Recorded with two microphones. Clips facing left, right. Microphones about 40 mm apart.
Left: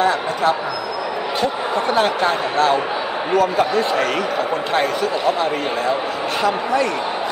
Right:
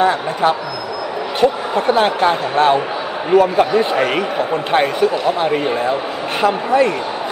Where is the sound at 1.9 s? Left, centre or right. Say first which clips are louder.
Right 4 dB; centre.